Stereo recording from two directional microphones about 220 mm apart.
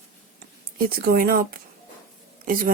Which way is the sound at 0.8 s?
40° right (ahead or behind).